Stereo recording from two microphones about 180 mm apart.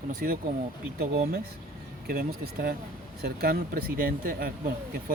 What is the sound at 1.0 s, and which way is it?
Speech, 55° right (ahead or behind).